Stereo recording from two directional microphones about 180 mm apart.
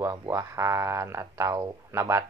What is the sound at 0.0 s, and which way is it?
Speech, 15° right (ahead or behind).